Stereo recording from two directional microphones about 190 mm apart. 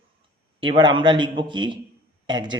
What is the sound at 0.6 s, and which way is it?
A man's voice, 25° right (ahead or behind).